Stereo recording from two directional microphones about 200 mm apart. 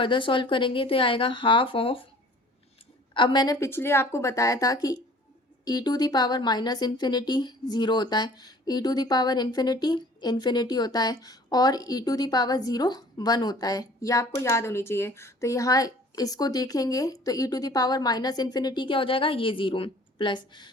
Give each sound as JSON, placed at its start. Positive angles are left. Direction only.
{"t": 0.0, "sound": "speech", "side_deg": 25}
{"t": 3.2, "sound": "a woman's voice", "side_deg": 20}